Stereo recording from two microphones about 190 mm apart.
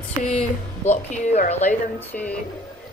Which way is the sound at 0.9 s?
40° left (ahead or behind).